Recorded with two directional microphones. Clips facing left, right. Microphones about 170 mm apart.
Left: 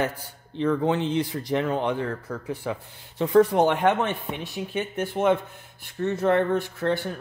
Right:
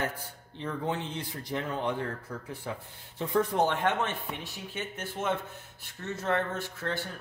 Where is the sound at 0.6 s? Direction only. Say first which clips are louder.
Left 10 dB; 90° left.